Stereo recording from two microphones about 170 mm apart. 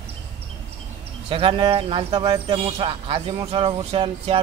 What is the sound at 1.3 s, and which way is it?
Speech, 30° right (ahead or behind).